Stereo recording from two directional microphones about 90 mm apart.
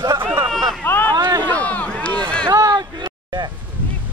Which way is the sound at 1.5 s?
15° left (ahead or behind).